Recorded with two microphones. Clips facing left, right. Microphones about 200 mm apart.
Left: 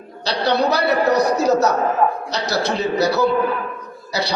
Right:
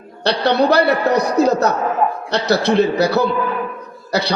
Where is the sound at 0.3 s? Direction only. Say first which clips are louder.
Right 4 dB; 60° right (ahead or behind).